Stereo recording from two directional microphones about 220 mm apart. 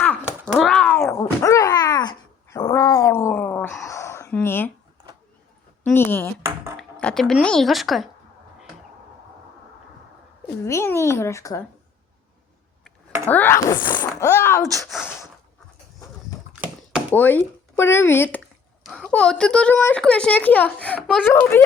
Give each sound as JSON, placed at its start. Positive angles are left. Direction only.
{"t": 0.4, "sound": "a sound", "side_deg": 0}
{"t": 1.4, "sound": "dog", "side_deg": 15}
{"t": 5.8, "sound": "a sound", "side_deg": 10}
{"t": 6.7, "sound": "speech", "side_deg": 5}
{"t": 10.6, "sound": "a child's voice", "side_deg": 10}
{"t": 13.2, "sound": "speech", "side_deg": 10}
{"t": 15.0, "sound": "snort", "side_deg": 10}
{"t": 17.1, "sound": "speech", "side_deg": 10}